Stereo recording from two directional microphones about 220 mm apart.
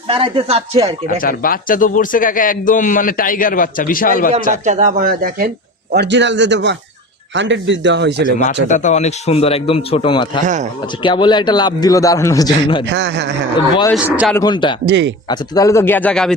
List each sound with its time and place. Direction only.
0.1 s speech: 25° right (ahead or behind)
1.0 s a man's voice: 40° left (ahead or behind)
4.5 s speech: 35° right (ahead or behind)
5.9 s a man's voice: 50° right (ahead or behind)
8.6 s a man's voice: 35° left (ahead or behind)
10.4 s speech: 35° right (ahead or behind)
11.0 s a man's voice: 20° left (ahead or behind)
12.8 s a man's voice: 50° right (ahead or behind)
13.9 s a man's voice: 5° right (ahead or behind)
14.3 s a man's voice: 20° left (ahead or behind)
14.8 s a man's voice: 55° right (ahead or behind)
15.3 s a man's voice: 15° left (ahead or behind)